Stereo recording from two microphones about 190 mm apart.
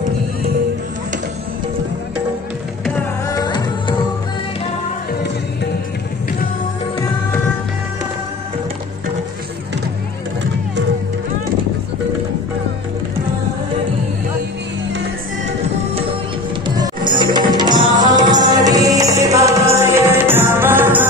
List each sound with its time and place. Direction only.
3.3 s music: 25° left (ahead or behind)
16.6 s music: 20° right (ahead or behind)